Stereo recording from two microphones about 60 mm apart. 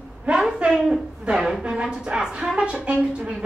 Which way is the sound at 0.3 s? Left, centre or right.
Centre.